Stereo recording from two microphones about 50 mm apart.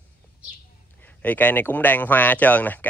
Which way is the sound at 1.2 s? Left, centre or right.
Left.